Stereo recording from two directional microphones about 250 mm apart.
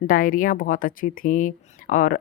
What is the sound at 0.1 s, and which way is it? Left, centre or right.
Speech, left.